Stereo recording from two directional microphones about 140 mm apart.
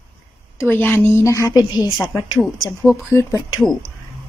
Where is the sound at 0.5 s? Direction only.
15° left (ahead or behind).